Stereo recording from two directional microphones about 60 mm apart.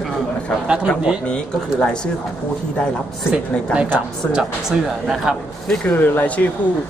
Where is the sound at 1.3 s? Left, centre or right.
Centre.